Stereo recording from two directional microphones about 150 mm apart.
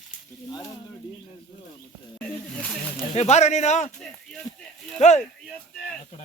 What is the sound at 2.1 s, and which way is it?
Snake, 10° left (ahead or behind).